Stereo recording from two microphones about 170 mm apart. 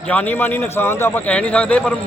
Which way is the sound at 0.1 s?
10° left (ahead or behind).